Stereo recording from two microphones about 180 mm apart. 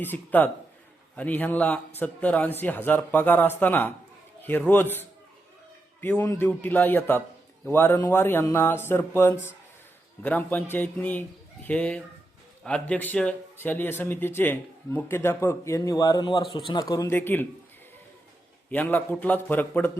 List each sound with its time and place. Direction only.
0.0 s speech: 10° left (ahead or behind)
6.0 s speech: 15° left (ahead or behind)
18.7 s speech: 10° left (ahead or behind)